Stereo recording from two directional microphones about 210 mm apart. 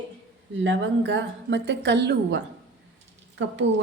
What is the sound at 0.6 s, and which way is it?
A woman's voice, 60° right (ahead or behind).